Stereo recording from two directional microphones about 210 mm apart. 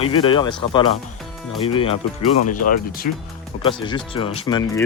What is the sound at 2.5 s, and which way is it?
Speech, 40° left (ahead or behind).